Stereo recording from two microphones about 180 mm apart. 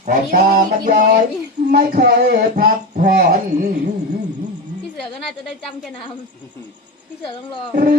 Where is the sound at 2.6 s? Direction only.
50° right (ahead or behind).